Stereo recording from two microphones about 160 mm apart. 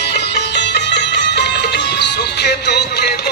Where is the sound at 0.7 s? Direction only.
90° left.